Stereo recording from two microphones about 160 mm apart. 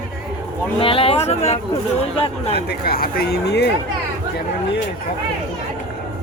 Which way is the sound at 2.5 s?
75° left (ahead or behind).